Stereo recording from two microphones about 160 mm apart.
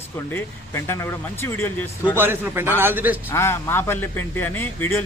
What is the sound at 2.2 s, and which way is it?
A man's voice, 15° right (ahead or behind).